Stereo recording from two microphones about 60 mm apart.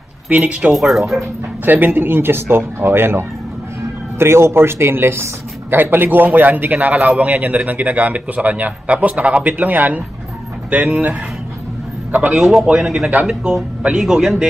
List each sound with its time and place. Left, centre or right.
0.3 s speech: centre
0.7 s speech: centre
1.6 s speech: right
12.1 s a man's voice: right
12.4 s speech: centre